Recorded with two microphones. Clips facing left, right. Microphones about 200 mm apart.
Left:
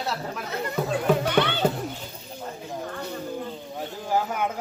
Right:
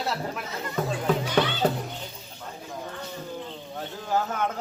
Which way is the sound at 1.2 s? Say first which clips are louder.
Left 2 dB; 60° left (ahead or behind).